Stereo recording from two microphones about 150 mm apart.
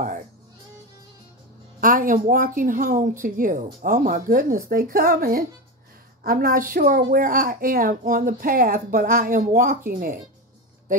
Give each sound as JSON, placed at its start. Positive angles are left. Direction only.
{"t": 1.8, "sound": "a woman's voice", "side_deg": -65}
{"t": 6.2, "sound": "a woman's voice", "side_deg": -75}